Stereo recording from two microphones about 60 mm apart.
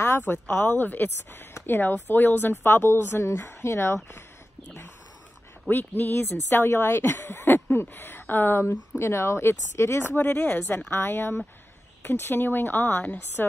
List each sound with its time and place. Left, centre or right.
0.3 s a woman's voice: left
2.6 s speech: left
5.7 s a woman's voice: left
7.4 s a woman's voice: left